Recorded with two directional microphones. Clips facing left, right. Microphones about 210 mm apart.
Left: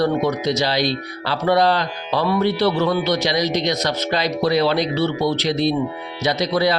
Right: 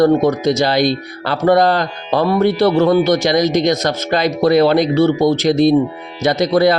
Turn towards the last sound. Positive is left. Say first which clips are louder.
# right 6 dB
turn(degrees=-50)  # may be behind; listen again after turning